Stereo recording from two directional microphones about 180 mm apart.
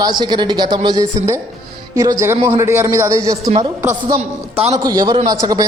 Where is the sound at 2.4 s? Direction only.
15° right (ahead or behind).